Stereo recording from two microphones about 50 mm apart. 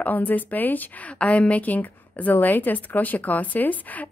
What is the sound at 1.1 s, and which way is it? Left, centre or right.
A woman's voice, left.